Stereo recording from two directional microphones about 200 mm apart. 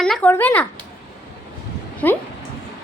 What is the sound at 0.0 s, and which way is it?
Speech, 5° left (ahead or behind).